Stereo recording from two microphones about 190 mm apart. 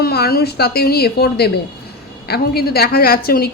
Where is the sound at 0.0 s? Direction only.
55° left (ahead or behind).